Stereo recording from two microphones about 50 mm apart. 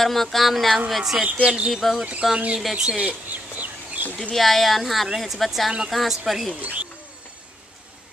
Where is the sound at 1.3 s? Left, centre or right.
Right.